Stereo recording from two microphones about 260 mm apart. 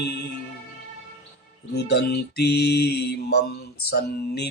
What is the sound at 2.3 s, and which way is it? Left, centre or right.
Mantra, left.